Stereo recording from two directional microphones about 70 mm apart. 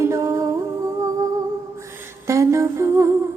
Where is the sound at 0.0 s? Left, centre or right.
Right.